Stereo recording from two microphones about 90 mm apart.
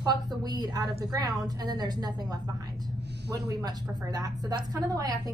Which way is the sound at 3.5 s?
45° right (ahead or behind).